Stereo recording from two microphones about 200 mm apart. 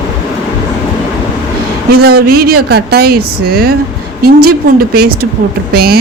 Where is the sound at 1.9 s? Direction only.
50° right (ahead or behind).